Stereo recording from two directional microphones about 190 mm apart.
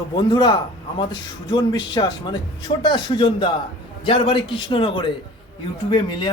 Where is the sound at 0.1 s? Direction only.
25° left (ahead or behind).